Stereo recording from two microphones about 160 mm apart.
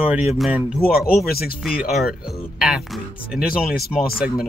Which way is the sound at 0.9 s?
70° left (ahead or behind).